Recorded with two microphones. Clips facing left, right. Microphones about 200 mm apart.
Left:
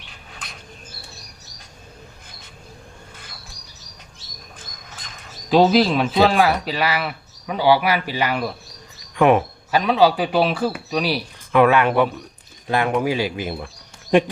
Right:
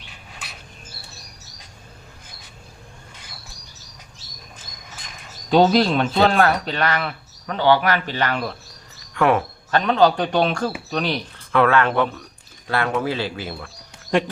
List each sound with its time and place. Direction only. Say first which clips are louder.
5.5 s speech: left 1 dB; centre (ahead or behind)
9.1 s a sound: left 3 dB; 15° left (ahead or behind)
9.8 s speech: even; 5° left (ahead or behind)